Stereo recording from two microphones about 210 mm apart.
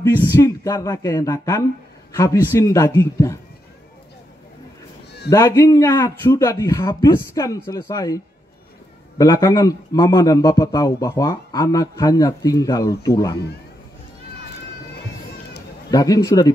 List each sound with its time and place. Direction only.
0.3 s a man's voice: 15° left (ahead or behind)
5.3 s a man's voice: 15° left (ahead or behind)
9.2 s a man's voice: 15° left (ahead or behind)
15.9 s a man's voice: 15° left (ahead or behind)